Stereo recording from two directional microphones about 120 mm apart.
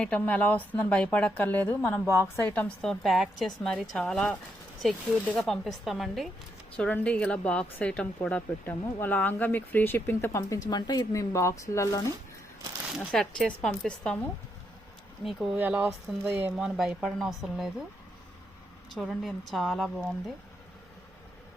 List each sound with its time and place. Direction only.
0.0 s a woman's voice: 10° left (ahead or behind)
6.7 s speech: 10° left (ahead or behind)
10.7 s speech: 35° left (ahead or behind)
13.1 s speech: 5° left (ahead or behind)
15.2 s a woman's voice: centre (ahead or behind)
15.5 s speech: 15° right (ahead or behind)
16.6 s a woman's voice: 5° right (ahead or behind)
18.9 s a woman's voice: centre (ahead or behind)